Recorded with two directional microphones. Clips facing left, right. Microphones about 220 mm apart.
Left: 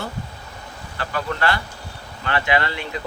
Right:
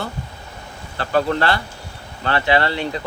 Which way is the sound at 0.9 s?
35° right (ahead or behind).